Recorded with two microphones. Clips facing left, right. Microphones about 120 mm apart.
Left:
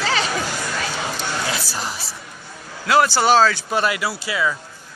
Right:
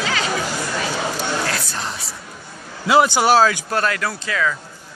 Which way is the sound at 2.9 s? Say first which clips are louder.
Right 1 dB; 20° right (ahead or behind).